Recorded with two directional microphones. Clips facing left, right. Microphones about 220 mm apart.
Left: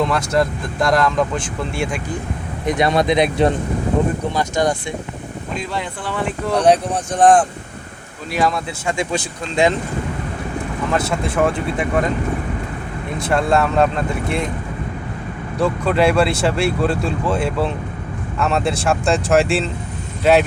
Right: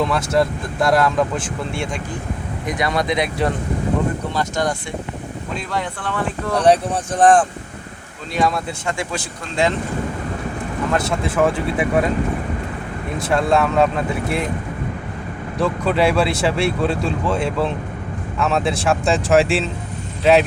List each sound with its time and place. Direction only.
0.0 s speech: centre (ahead or behind)
2.6 s speech: 25° left (ahead or behind)
6.5 s speech: centre (ahead or behind)
8.9 s speech: 15° left (ahead or behind)
10.9 s speech: centre (ahead or behind)
13.1 s speech: centre (ahead or behind)
15.5 s speech: centre (ahead or behind)